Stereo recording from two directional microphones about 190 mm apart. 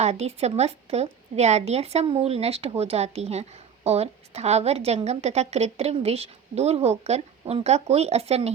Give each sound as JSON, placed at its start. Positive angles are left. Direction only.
{"t": 0.0, "sound": "a woman's voice", "side_deg": -35}